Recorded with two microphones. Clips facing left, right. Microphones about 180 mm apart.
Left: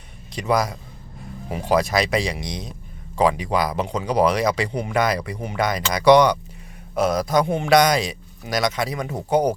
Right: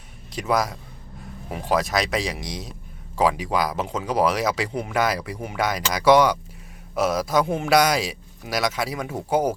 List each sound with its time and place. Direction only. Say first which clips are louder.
0.3 s speech: left 2 dB; centre (ahead or behind)